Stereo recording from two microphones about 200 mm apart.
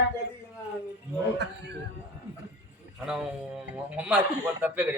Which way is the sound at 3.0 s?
5° right (ahead or behind).